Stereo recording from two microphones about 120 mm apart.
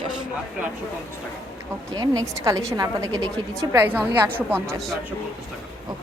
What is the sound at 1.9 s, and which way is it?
A woman's voice, 30° right (ahead or behind).